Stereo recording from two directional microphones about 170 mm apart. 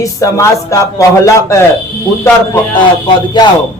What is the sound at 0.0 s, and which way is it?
A man's voice, 20° left (ahead or behind).